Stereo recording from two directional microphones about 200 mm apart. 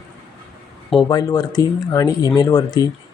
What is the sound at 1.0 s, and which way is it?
Speech, 20° left (ahead or behind).